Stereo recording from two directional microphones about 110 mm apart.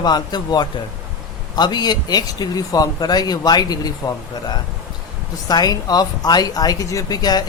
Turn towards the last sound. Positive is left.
turn(degrees=35)  # may be behind; listen again after turning